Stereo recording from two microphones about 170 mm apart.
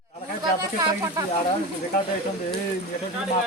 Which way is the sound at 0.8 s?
20° right (ahead or behind).